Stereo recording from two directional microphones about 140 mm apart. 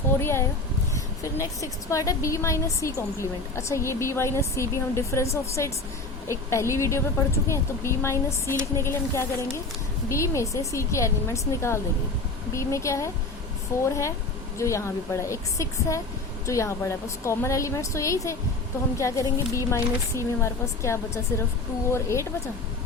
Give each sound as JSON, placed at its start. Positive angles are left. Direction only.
{"t": 0.2, "sound": "a woman's voice", "side_deg": 15}